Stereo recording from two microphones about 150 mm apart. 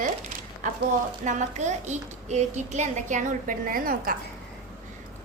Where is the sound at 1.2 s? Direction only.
55° right (ahead or behind); by 4.2 s 70° right (ahead or behind).